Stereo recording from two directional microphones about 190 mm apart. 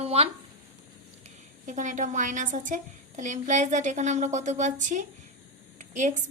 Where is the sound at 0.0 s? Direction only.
30° right (ahead or behind).